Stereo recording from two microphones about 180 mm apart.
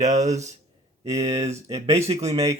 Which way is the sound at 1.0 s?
20° right (ahead or behind).